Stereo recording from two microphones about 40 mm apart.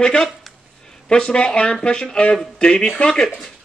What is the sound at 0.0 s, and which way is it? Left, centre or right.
Speech, left.